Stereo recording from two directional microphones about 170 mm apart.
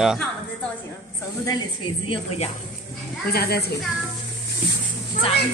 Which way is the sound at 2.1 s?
35° left (ahead or behind).